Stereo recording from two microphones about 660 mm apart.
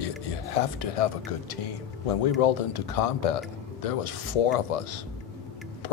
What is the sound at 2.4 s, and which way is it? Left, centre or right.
Speech, left.